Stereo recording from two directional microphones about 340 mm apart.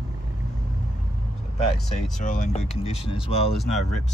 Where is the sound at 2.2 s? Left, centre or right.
Left.